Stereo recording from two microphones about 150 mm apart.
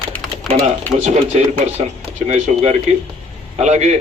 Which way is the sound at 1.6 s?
50° right (ahead or behind).